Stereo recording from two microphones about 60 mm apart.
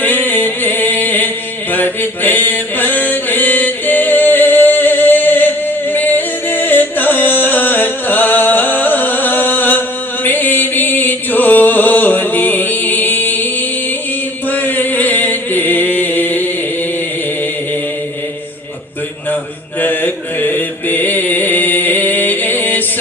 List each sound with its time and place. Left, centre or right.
0.0 s a sound: left
1.7 s chant: left
10.2 s music: left
14.5 s chant: left
19.8 s mantra: left